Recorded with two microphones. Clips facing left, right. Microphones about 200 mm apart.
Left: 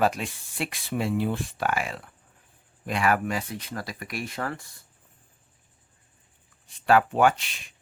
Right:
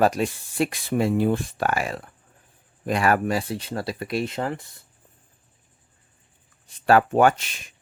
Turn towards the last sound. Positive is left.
turn(degrees=-45)  # may be behind; listen again after turning